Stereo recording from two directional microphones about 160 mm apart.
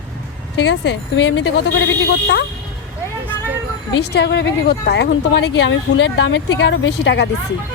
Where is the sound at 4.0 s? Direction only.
90° left.